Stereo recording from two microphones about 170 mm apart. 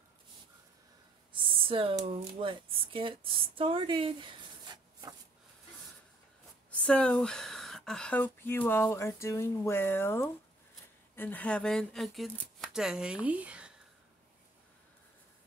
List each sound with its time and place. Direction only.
1.3 s speech: 30° right (ahead or behind)
6.8 s speech: 5° left (ahead or behind)